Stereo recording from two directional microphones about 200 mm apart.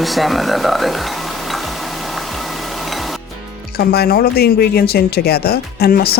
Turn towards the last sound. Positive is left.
turn(degrees=50)  # may be behind; listen again after turning